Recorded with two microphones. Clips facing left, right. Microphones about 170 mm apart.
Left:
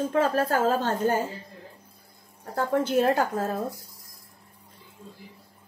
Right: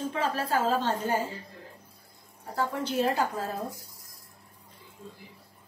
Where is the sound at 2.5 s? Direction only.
50° left (ahead or behind).